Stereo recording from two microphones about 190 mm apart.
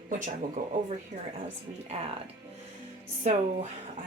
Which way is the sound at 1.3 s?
35° right (ahead or behind).